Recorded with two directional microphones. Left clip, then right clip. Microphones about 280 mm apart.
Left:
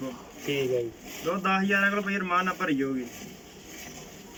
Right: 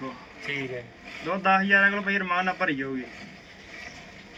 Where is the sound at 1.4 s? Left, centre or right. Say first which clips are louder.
Right 5 dB; centre.